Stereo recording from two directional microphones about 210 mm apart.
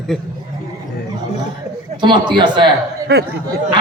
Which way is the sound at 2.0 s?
20° right (ahead or behind).